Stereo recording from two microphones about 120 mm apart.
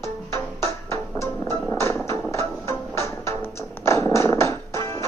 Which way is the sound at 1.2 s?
20° left (ahead or behind).